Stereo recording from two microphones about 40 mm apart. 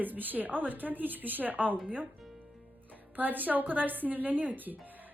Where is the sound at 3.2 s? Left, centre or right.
Right.